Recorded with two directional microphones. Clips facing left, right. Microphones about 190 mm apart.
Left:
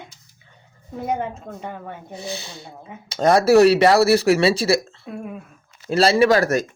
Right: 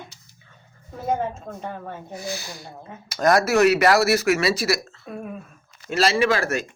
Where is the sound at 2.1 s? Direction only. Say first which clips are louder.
Left 1 dB; 25° left (ahead or behind).